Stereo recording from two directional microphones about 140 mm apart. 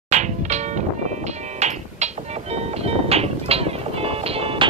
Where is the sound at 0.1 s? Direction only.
55° right (ahead or behind).